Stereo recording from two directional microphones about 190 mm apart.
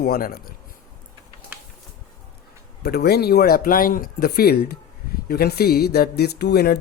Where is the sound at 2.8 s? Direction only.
55° left (ahead or behind).